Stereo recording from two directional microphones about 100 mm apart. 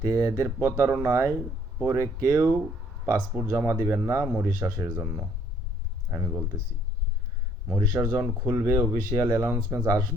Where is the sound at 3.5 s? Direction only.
30° right (ahead or behind).